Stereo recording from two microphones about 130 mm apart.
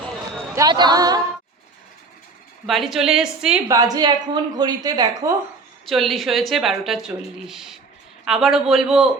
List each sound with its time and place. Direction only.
0.5 s speech: 30° right (ahead or behind)
2.6 s a woman's voice: centre (ahead or behind)
3.7 s a woman's voice: 30° right (ahead or behind)
5.8 s a woman's voice: centre (ahead or behind)